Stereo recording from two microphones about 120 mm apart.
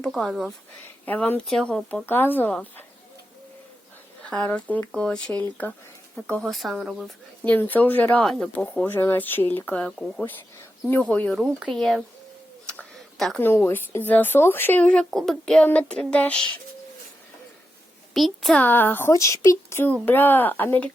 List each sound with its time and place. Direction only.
0.0 s speech: centre (ahead or behind)
1.0 s speech: 15° left (ahead or behind)
4.2 s speech: 10° left (ahead or behind)
7.4 s speech: 15° left (ahead or behind)
8.2 s speech: 5° left (ahead or behind)
11.3 s speech: centre (ahead or behind)
12.6 s a sound: 5° left (ahead or behind)
13.4 s speech: 20° left (ahead or behind)
18.1 s a child's voice: centre (ahead or behind)
18.6 s speech: 15° left (ahead or behind)